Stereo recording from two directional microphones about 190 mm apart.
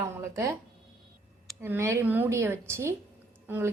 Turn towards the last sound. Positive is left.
turn(degrees=-10)  # may be behind; listen again after turning